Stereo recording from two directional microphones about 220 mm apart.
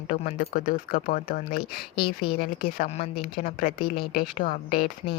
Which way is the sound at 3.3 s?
40° left (ahead or behind).